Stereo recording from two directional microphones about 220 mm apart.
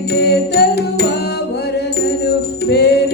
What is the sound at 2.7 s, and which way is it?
Music, 50° left (ahead or behind).